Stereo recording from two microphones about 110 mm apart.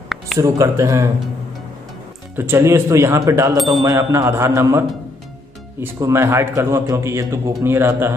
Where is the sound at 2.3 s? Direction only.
20° right (ahead or behind); by 4.0 s 40° right (ahead or behind).